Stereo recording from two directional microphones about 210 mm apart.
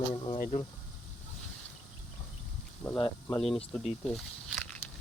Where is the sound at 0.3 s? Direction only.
40° left (ahead or behind).